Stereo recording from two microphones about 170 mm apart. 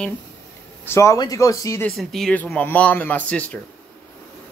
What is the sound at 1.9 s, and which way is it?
Speech, 5° left (ahead or behind).